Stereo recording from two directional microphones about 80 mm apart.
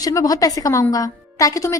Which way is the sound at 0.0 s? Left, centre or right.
Left.